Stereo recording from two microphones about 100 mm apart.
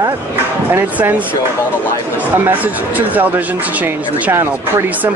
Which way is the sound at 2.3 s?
20° right (ahead or behind).